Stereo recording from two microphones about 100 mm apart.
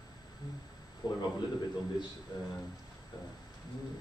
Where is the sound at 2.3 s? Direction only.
45° left (ahead or behind).